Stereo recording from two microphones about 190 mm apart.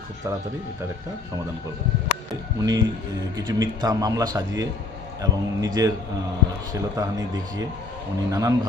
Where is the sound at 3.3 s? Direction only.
20° right (ahead or behind).